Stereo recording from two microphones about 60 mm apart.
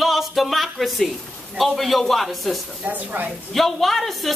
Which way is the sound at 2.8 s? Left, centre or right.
Right.